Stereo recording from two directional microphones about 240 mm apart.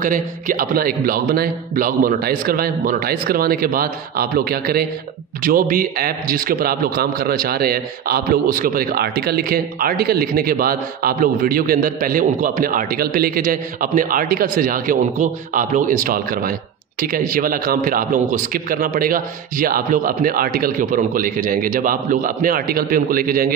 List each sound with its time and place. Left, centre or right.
0.0 s a man's voice: right